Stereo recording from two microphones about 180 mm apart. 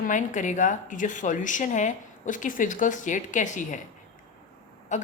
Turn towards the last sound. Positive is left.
turn(degrees=40)  # may be behind; listen again after turning